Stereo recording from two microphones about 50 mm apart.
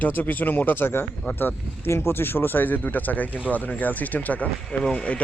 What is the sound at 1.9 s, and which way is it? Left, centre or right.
Speech, left.